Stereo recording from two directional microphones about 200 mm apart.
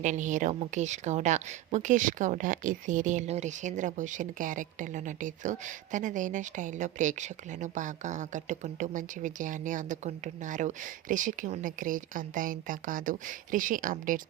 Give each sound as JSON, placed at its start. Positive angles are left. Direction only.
{"t": 0.0, "sound": "a woman's voice", "side_deg": -40}